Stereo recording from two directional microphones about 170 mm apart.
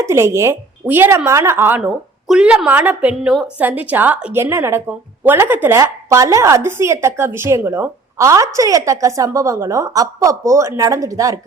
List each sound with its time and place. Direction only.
0.0 s a woman's voice: 15° right (ahead or behind)